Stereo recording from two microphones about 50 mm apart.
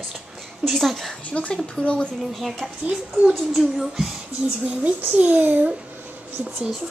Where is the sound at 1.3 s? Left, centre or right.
Left.